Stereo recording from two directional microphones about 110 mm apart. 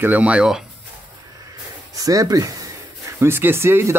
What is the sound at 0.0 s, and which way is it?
Speech, 15° right (ahead or behind).